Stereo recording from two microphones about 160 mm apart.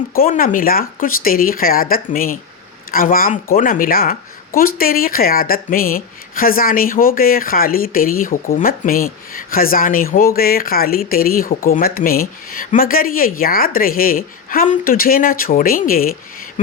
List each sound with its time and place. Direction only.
0.1 s a woman's voice: 65° left (ahead or behind)